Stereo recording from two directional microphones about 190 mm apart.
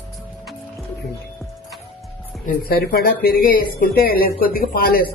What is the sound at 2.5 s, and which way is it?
Speech, 55° left (ahead or behind).